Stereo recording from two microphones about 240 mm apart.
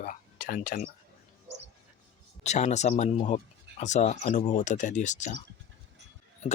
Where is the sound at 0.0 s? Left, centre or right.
Left.